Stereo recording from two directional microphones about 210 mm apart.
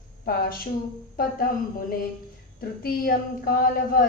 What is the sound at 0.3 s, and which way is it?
A woman's voice, 45° left (ahead or behind).